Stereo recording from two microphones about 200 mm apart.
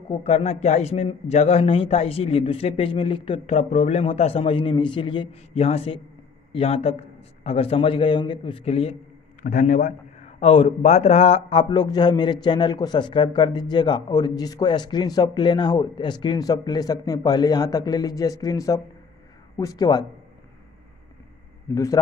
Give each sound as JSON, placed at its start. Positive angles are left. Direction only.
{"t": 0.1, "sound": "a man's voice", "side_deg": 30}